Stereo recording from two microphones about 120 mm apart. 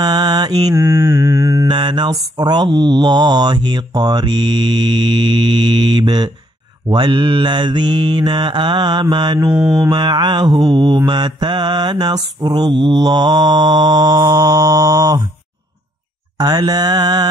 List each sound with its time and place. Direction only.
0.0 s mantra: 35° right (ahead or behind)
0.7 s mantra: 20° right (ahead or behind)
1.7 s mantra: 40° right (ahead or behind)
9.5 s mantra: 5° right (ahead or behind)
9.8 s mantra: 40° right (ahead or behind)
16.3 s mantra: 35° right (ahead or behind)